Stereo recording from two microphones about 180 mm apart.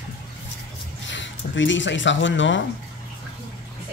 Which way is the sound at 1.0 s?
90° left.